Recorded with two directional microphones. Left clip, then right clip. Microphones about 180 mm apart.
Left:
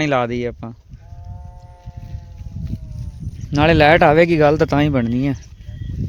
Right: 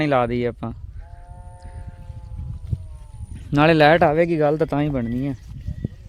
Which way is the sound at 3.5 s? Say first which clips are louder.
Left 2 dB; centre (ahead or behind).